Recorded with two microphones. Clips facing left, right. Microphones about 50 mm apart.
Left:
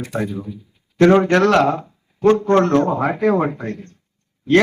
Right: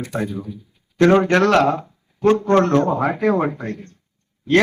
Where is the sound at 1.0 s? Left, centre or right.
Centre.